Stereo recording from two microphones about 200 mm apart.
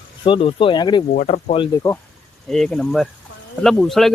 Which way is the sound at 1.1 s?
40° left (ahead or behind).